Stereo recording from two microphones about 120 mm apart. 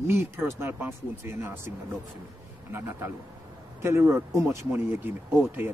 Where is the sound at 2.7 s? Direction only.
20° right (ahead or behind).